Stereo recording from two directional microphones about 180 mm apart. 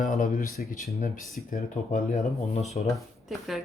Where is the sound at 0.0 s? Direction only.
45° left (ahead or behind).